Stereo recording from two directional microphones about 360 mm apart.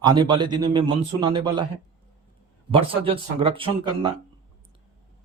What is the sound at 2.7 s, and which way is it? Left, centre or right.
A man's voice, centre.